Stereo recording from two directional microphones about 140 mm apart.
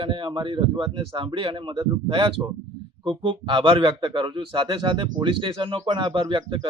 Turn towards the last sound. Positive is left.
turn(degrees=-35)  # may be behind; listen again after turning